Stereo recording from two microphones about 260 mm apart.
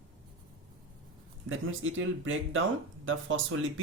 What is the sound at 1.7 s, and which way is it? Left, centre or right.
Speech, right.